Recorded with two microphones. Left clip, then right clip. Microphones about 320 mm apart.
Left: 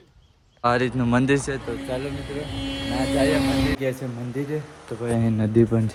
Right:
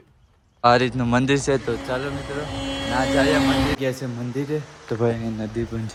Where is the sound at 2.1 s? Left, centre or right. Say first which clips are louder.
Right 3 dB; right.